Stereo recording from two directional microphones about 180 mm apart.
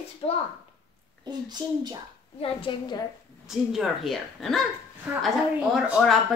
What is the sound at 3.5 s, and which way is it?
Speech, centre (ahead or behind).